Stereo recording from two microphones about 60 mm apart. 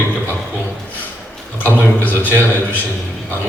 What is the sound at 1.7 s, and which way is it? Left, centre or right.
A man's voice, left.